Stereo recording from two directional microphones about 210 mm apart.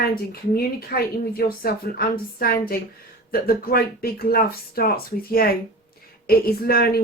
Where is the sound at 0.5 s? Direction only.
45° left (ahead or behind).